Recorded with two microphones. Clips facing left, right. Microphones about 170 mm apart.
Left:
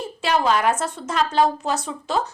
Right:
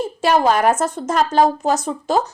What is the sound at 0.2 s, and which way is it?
Speech, 45° right (ahead or behind).